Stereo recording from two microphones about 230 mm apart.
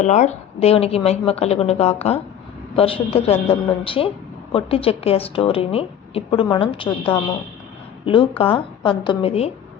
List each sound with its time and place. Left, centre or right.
0.0 s a woman's voice: left
6.8 s a woman's voice: centre
8.0 s a woman's voice: left